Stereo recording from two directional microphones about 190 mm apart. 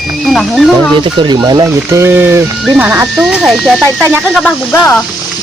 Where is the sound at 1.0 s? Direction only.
25° right (ahead or behind).